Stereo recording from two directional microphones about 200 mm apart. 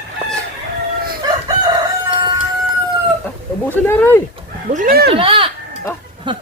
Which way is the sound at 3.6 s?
10° left (ahead or behind).